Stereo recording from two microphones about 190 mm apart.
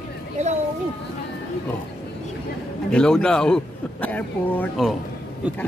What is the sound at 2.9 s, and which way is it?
A man's voice, 5° left (ahead or behind).